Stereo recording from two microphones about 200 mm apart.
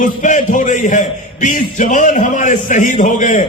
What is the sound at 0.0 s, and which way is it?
A man's voice, 40° left (ahead or behind).